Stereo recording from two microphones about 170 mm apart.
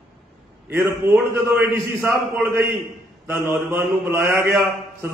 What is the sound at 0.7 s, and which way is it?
Mantra, 15° right (ahead or behind).